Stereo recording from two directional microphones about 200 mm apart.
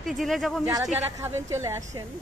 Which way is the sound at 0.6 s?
15° right (ahead or behind).